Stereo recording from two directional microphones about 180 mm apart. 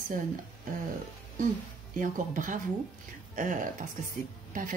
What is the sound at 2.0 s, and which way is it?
Speech, 45° right (ahead or behind).